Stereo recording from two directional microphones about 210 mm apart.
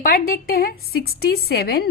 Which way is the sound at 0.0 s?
45° left (ahead or behind).